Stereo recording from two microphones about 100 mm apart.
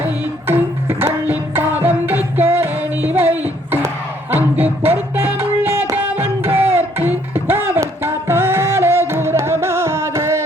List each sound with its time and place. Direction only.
0.4 s music: 25° right (ahead or behind)
3.3 s a sound: 20° right (ahead or behind)
4.3 s music: 20° right (ahead or behind)